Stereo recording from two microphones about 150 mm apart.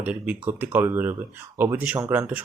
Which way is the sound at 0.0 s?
10° right (ahead or behind).